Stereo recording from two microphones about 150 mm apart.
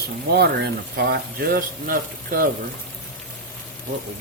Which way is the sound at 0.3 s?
90° right.